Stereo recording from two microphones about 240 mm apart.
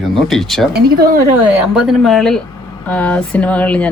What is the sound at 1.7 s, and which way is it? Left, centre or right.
Speech, centre.